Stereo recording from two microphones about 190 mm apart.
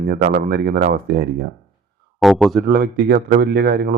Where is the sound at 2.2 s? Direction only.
Centre (ahead or behind).